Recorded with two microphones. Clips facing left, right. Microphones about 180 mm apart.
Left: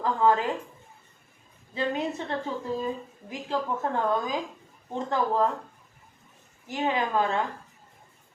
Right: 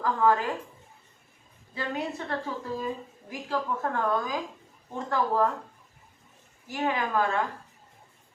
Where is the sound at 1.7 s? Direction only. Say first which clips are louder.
Left 4 dB; 20° left (ahead or behind).